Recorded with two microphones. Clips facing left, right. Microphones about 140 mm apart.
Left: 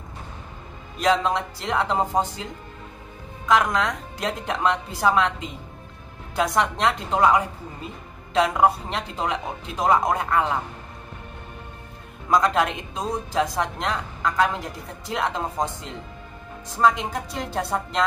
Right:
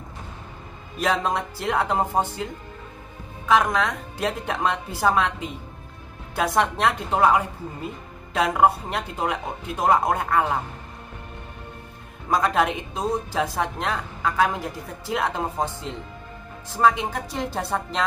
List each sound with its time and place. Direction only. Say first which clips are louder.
0.9 s speech: left 2 dB; 5° right (ahead or behind)
3.4 s speech: even; centre (ahead or behind)
6.3 s speech: even; centre (ahead or behind)
12.4 s speech: left 1 dB; 5° right (ahead or behind)